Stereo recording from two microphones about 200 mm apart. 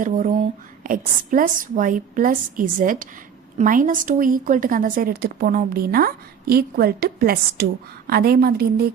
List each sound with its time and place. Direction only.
0.0 s a woman's voice: 40° right (ahead or behind)